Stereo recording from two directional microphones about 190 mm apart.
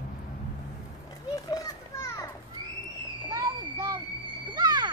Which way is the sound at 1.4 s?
20° left (ahead or behind).